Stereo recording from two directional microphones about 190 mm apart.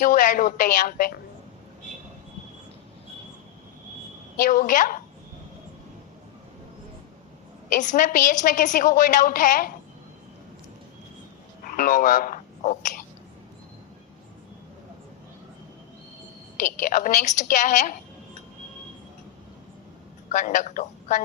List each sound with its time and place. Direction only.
0.0 s a woman's voice: 45° left (ahead or behind)
4.4 s a woman's voice: 45° left (ahead or behind)
7.7 s a woman's voice: 40° left (ahead or behind)
11.6 s speech: 45° left (ahead or behind)
16.6 s a woman's voice: 45° left (ahead or behind)
20.3 s a woman's voice: 40° left (ahead or behind)